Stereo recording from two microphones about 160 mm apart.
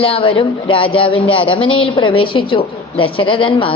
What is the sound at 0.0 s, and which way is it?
A woman's voice, 35° left (ahead or behind).